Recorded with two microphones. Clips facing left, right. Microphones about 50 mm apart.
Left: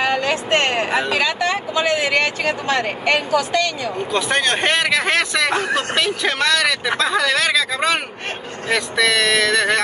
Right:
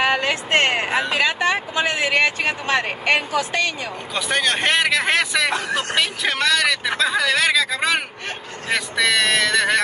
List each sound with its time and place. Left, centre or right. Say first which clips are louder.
0.0 s a sound: left 1 dB; right
0.8 s speech: left 2 dB; centre
1.1 s a woman's voice: even; right
4.1 s speech: left 2 dB; centre